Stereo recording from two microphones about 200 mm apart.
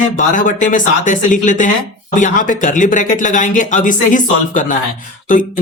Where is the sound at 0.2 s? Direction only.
40° left (ahead or behind).